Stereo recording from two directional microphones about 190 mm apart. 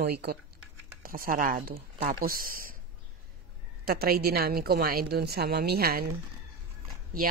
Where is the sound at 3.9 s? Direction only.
50° right (ahead or behind).